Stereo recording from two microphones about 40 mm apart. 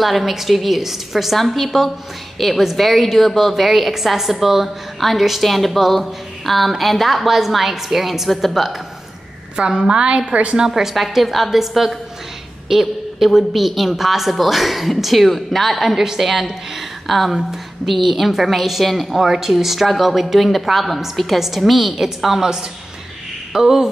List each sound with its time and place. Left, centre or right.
0.0 s a woman's voice: centre
9.6 s a woman's voice: centre
10.7 s a woman's voice: centre
23.5 s speech: centre